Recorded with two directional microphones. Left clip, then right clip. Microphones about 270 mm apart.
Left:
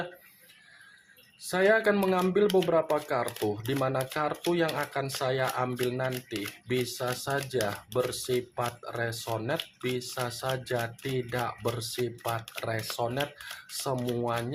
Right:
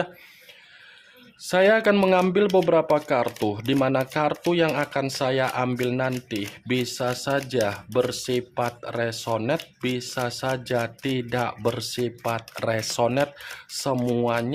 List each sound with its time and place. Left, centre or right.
1.4 s speech: right